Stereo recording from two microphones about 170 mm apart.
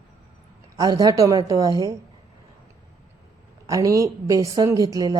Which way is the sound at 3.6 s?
20° right (ahead or behind).